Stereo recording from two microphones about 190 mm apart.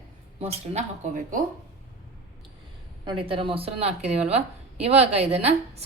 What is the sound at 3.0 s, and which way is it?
A woman's voice, 30° right (ahead or behind).